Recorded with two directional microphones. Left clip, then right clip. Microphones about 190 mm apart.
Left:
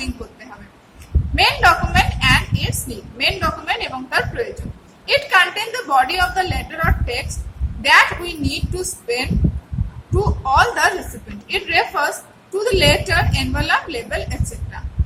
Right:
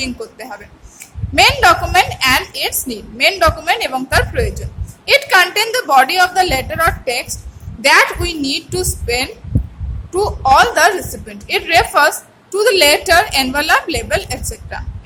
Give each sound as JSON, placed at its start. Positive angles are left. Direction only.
{"t": 1.4, "sound": "a woman's voice", "side_deg": -45}